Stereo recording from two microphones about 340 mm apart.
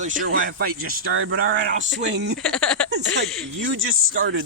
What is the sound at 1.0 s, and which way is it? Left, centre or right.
Speech, right.